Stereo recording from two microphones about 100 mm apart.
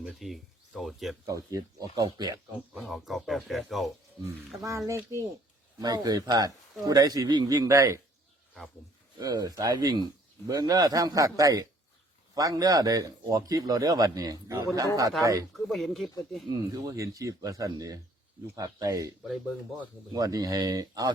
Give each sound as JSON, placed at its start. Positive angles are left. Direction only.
{"t": 0.0, "sound": "speech", "side_deg": 0}
{"t": 1.3, "sound": "a man's voice", "side_deg": -35}
{"t": 2.7, "sound": "speech", "side_deg": 0}
{"t": 4.5, "sound": "a man's voice", "side_deg": -30}
{"t": 5.8, "sound": "a man's voice", "side_deg": -40}
{"t": 9.1, "sound": "a man's voice", "side_deg": -40}
{"t": 15.5, "sound": "speech", "side_deg": 5}
{"t": 16.5, "sound": "a man's voice", "side_deg": -40}
{"t": 20.1, "sound": "a man's voice", "side_deg": -40}